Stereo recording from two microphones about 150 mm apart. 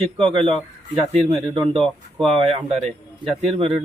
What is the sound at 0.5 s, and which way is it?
Speech, 35° right (ahead or behind).